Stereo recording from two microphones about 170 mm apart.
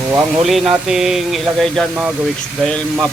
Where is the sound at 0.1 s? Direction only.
15° right (ahead or behind).